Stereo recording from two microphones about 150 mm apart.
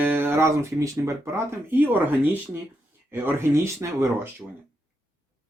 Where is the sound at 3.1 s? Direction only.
15° right (ahead or behind).